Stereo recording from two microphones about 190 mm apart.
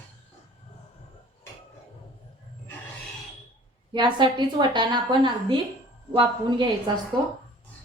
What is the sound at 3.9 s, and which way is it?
A woman's voice, 25° right (ahead or behind).